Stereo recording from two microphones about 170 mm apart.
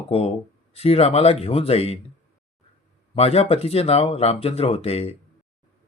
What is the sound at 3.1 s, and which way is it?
Speech, 35° left (ahead or behind).